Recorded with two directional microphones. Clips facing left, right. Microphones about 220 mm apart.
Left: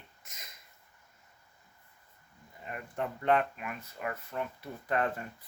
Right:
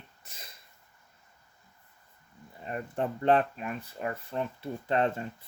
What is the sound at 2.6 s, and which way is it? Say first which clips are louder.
Speech: right 5 dB; 35° right (ahead or behind).